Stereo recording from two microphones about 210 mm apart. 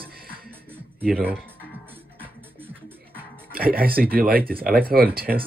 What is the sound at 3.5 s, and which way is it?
Speech, 45° right (ahead or behind).